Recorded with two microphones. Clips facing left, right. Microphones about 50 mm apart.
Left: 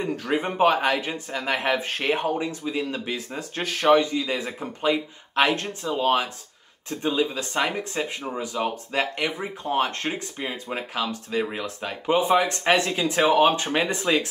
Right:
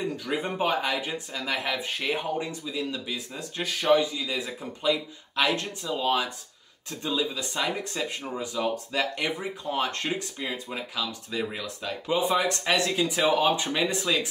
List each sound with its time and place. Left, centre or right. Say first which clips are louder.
0.0 s speech: left 4 dB; left
4.3 s speech: left 4 dB; left